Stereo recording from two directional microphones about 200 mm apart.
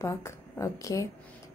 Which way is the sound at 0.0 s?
15° left (ahead or behind).